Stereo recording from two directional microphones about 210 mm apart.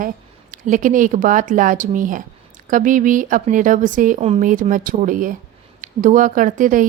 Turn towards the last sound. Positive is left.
turn(degrees=-40)  # may be behind; listen again after turning